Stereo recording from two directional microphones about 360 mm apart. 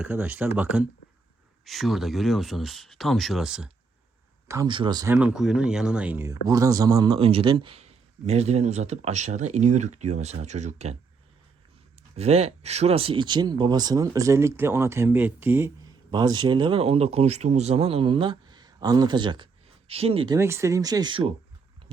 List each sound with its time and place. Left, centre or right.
0.0 s speech: centre
12.1 s speech: centre